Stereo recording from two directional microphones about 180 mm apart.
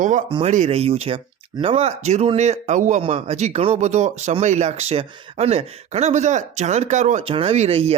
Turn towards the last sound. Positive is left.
turn(degrees=-35)  # may be behind; listen again after turning